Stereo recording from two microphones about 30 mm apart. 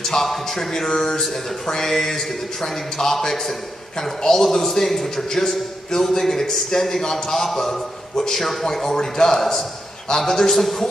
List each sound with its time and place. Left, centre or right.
0.0 s a man's voice: centre